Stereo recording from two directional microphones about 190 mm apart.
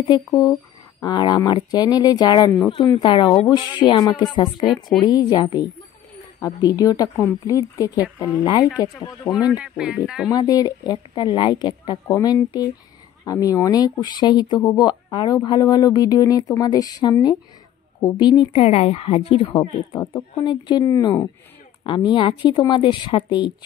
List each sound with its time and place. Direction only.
0.1 s speech: 20° left (ahead or behind)
9.5 s speech: 5° right (ahead or behind)
10.3 s speech: 20° left (ahead or behind)
19.5 s speech: 15° left (ahead or behind)